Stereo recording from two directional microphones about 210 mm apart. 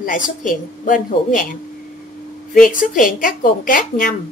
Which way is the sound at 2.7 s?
40° left (ahead or behind).